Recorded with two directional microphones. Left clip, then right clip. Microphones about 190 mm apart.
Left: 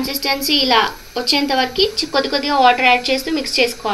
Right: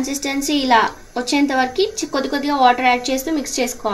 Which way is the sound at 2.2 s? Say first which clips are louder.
Left 1 dB; 40° right (ahead or behind).